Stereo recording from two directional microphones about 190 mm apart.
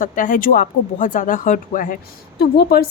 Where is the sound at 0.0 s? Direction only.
45° left (ahead or behind).